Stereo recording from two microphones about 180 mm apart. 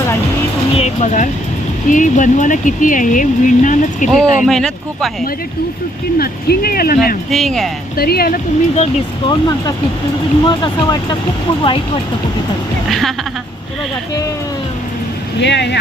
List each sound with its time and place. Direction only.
0.8 s speech: 40° left (ahead or behind)
4.1 s speech: centre (ahead or behind)
6.1 s speech: 55° left (ahead or behind)
7.3 s speech: centre (ahead or behind)
7.9 s speech: 60° left (ahead or behind)
8.7 s speech: 35° left (ahead or behind)
9.3 s speech: 20° left (ahead or behind)
12.9 s speech: centre (ahead or behind)
15.4 s speech: 70° left (ahead or behind)